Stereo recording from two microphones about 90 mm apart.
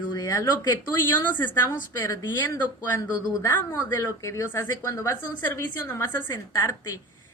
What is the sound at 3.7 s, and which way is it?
Speech, 30° left (ahead or behind).